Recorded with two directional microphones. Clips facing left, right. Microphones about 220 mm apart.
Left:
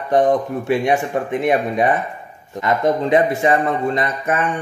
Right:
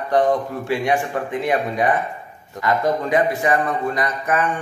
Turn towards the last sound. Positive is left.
turn(degrees=25)  # may be behind; listen again after turning